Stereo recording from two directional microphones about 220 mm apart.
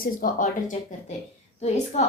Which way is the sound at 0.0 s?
40° left (ahead or behind).